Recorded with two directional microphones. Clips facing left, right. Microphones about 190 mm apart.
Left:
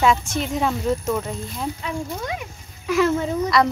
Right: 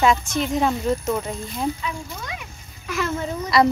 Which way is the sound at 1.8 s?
50° left (ahead or behind).